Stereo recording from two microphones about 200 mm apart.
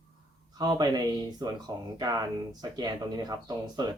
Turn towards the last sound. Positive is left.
turn(degrees=-20)  # may be behind; listen again after turning